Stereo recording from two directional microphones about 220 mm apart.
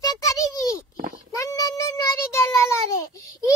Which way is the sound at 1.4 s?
15° left (ahead or behind).